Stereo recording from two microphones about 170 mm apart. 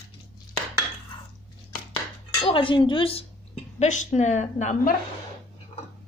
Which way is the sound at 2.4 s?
30° left (ahead or behind).